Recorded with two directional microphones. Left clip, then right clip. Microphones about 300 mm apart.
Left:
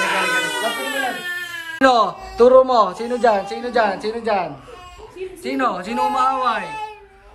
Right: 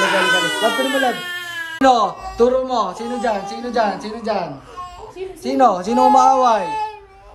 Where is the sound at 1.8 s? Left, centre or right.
Centre.